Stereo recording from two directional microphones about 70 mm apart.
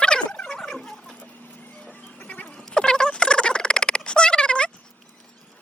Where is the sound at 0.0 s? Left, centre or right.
Centre.